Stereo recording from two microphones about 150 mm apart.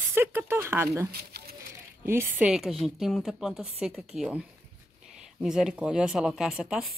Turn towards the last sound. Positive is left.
turn(degrees=-5)  # may be behind; listen again after turning